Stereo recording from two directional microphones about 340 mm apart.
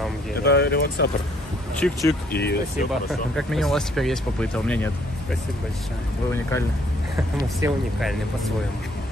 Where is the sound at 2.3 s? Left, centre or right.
Left.